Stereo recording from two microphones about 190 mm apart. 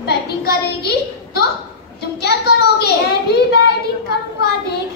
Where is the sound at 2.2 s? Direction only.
60° left (ahead or behind).